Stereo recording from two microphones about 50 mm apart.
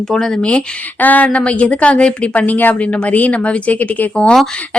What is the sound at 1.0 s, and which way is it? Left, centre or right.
A woman's voice, left.